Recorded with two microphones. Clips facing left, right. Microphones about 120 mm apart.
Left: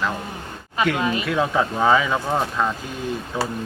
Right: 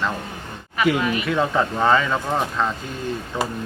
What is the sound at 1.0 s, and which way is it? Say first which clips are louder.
Speech: even; 25° left (ahead or behind).